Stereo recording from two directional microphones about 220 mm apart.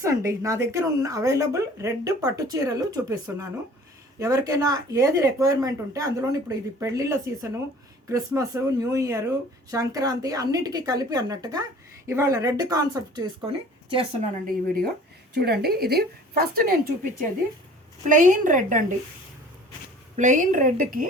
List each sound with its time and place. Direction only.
0.0 s a woman's voice: 15° right (ahead or behind)
13.9 s a woman's voice: 35° right (ahead or behind)
18.1 s speech: 35° right (ahead or behind)
20.1 s speech: 35° right (ahead or behind)